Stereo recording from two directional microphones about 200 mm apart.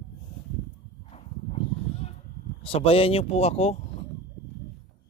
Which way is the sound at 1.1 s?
30° left (ahead or behind).